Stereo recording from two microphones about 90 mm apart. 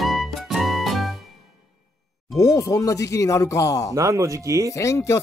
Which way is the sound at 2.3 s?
35° left (ahead or behind).